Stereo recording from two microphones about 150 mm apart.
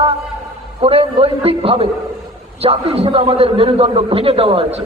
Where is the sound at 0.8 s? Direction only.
40° right (ahead or behind).